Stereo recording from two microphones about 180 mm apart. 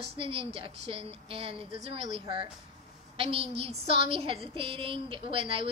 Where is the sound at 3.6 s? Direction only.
35° right (ahead or behind).